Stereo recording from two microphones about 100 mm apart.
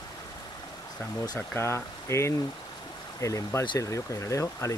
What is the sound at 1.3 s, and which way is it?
Speech, 25° left (ahead or behind).